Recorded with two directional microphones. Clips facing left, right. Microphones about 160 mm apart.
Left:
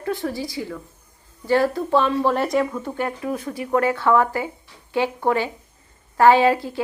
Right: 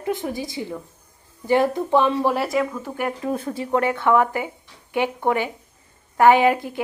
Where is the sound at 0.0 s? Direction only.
20° right (ahead or behind); by 2.9 s centre (ahead or behind).